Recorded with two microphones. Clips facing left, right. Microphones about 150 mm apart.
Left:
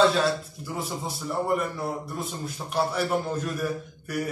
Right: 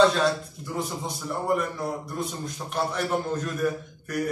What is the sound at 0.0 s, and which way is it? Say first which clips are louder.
A man's voice: right 1 dB; 5° left (ahead or behind).